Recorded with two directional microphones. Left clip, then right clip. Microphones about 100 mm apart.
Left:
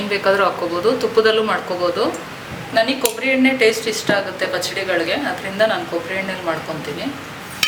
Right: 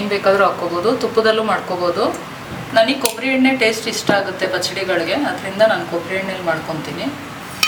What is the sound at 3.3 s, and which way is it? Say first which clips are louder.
Speech: even; centre (ahead or behind).